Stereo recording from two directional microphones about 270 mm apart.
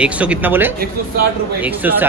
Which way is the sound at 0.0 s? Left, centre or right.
Centre.